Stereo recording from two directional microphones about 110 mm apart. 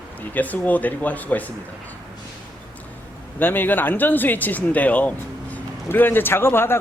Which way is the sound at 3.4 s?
20° left (ahead or behind).